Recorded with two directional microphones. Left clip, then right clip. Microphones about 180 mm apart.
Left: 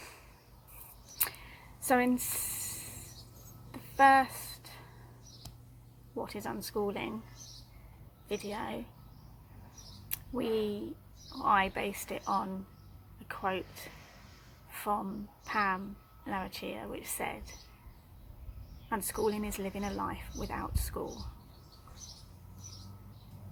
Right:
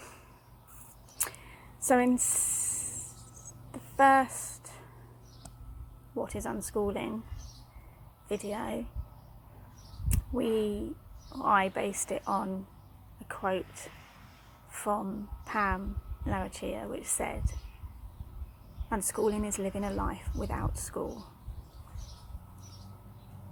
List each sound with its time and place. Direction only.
1.9 s speech: 10° right (ahead or behind)
3.7 s a sound: 10° right (ahead or behind)
6.1 s speech: 10° right (ahead or behind)
8.3 s speech: 10° right (ahead or behind)
10.1 s speech: 10° right (ahead or behind)
14.7 s a sound: 10° right (ahead or behind)
15.4 s speech: 10° right (ahead or behind)
18.9 s speech: 10° right (ahead or behind)